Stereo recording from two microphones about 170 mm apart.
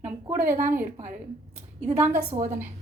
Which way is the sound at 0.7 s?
15° right (ahead or behind).